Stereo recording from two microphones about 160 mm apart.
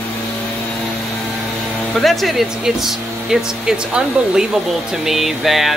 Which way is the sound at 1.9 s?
Centre (ahead or behind).